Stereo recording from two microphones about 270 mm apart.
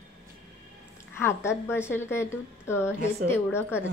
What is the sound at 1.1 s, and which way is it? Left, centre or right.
A woman's voice, centre.